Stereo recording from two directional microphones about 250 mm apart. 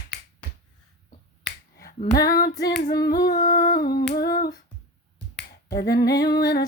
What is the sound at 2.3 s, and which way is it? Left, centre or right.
Humming, left.